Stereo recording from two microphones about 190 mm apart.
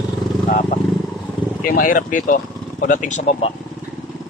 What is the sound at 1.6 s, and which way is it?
Speech, 50° left (ahead or behind).